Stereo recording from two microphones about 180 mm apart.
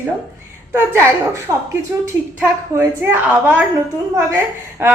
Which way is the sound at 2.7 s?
10° right (ahead or behind).